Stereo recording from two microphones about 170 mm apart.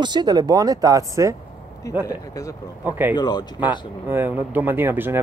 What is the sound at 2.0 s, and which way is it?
Speech, 20° left (ahead or behind).